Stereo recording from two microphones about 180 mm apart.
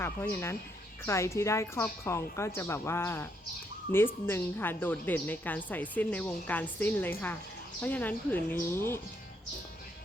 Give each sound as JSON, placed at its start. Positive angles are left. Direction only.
{"t": 0.0, "sound": "a woman's voice", "side_deg": 15}